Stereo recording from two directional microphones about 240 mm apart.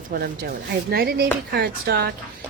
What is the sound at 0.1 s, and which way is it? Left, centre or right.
A woman's voice, right.